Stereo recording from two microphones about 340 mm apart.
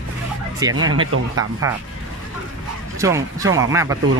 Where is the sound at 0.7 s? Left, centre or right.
Right.